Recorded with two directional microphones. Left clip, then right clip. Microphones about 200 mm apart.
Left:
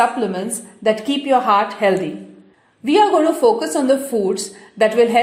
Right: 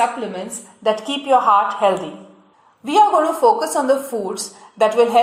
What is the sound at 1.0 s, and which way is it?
A woman's voice, 20° left (ahead or behind).